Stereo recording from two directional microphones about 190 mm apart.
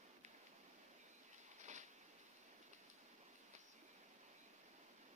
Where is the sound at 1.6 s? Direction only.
40° right (ahead or behind).